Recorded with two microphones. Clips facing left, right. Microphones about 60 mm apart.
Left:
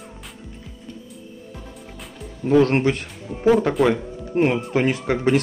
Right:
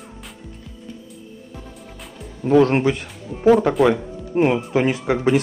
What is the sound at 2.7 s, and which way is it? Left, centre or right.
Speech, centre.